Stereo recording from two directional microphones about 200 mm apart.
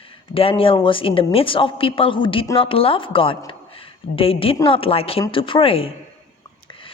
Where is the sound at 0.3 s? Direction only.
25° left (ahead or behind).